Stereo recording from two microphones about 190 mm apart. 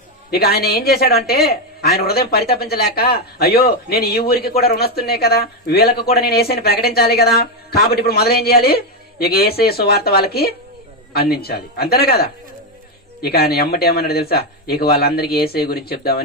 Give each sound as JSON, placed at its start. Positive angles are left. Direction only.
{"t": 0.3, "sound": "speech", "side_deg": 55}